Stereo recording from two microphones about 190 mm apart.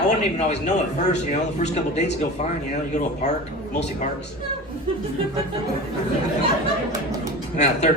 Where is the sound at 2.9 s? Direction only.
40° left (ahead or behind).